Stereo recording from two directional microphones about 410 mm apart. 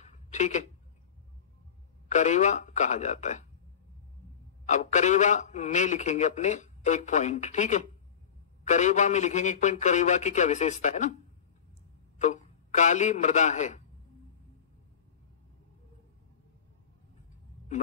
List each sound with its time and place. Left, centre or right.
0.0 s a sound: centre
2.0 s a man's voice: centre
4.6 s a man's voice: centre
12.2 s a man's voice: centre